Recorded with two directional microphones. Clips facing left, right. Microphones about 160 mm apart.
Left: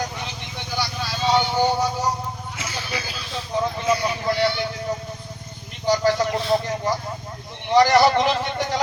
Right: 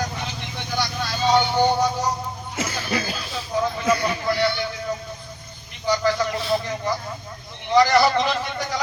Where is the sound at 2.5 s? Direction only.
45° right (ahead or behind).